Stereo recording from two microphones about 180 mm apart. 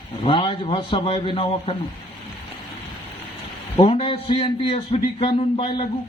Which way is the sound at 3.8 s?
30° left (ahead or behind).